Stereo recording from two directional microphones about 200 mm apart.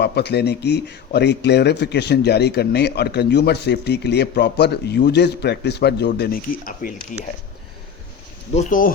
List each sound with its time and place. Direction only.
0.0 s speech: 55° left (ahead or behind)
8.5 s speech: 40° left (ahead or behind)